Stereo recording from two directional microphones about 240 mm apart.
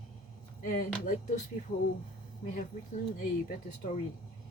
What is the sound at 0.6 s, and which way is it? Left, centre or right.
Speech, left.